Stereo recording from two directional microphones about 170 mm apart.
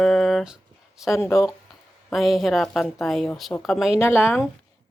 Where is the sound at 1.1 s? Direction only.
15° left (ahead or behind).